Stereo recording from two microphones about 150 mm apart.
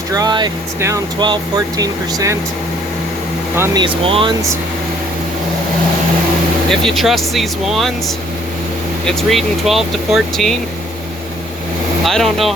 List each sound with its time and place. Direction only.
0.1 s speech: 25° right (ahead or behind)
3.8 s speech: 35° right (ahead or behind)
6.7 s speech: centre (ahead or behind)
9.0 s speech: centre (ahead or behind)
12.0 s speech: centre (ahead or behind)